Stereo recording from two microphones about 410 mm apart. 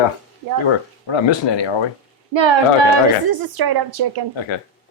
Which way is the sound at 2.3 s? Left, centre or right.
Right.